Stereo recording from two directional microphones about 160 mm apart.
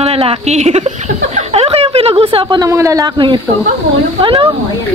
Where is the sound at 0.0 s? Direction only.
40° right (ahead or behind).